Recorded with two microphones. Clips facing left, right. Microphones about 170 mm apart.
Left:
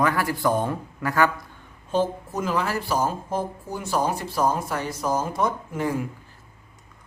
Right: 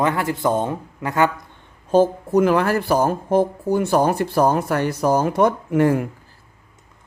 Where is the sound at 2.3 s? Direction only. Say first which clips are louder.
Right 9 dB; 60° right (ahead or behind).